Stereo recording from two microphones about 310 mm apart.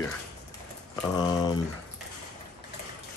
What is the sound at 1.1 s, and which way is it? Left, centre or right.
Speech, centre.